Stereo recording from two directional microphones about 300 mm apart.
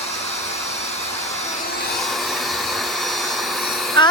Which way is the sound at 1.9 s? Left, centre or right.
Centre.